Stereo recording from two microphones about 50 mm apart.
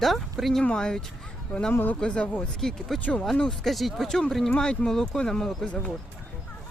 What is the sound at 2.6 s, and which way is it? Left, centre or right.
Speech, centre.